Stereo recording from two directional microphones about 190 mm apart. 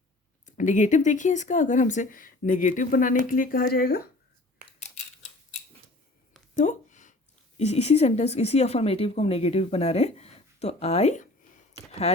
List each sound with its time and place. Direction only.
0.4 s speech: 40° left (ahead or behind)
6.5 s a sound: 40° left (ahead or behind)
7.6 s speech: 35° left (ahead or behind)